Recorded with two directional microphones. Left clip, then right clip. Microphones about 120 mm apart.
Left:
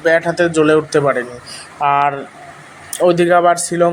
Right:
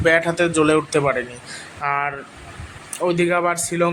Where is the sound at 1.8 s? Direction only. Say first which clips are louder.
Left 8 dB; 35° left (ahead or behind).